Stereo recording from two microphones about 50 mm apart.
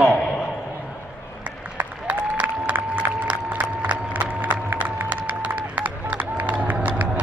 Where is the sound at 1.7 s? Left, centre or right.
Right.